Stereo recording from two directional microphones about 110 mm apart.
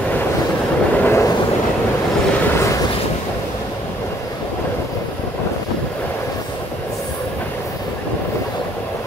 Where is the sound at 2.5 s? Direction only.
25° left (ahead or behind).